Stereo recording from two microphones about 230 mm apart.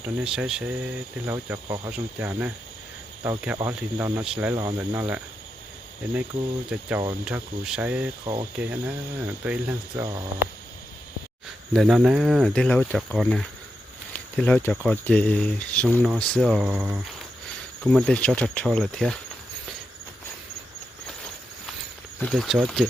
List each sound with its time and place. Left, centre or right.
0.0 s speech: centre
6.7 s speech: centre
11.7 s speech: centre
17.9 s speech: centre
22.2 s speech: centre